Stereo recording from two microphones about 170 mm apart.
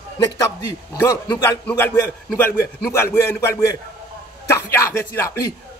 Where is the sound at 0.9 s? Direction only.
20° left (ahead or behind).